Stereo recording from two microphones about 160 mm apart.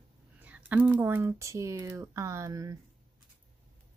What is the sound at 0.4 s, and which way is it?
Speech, 10° right (ahead or behind).